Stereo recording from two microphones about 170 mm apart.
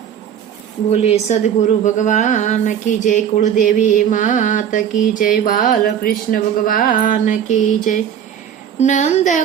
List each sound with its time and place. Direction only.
0.9 s mantra: 40° left (ahead or behind)